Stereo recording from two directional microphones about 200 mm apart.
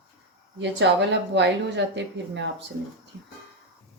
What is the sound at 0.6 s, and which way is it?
Speech, 65° right (ahead or behind).